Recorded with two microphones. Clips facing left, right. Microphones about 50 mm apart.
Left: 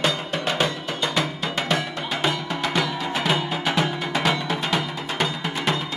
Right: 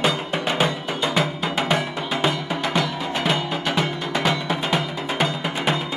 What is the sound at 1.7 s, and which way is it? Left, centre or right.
Music, centre.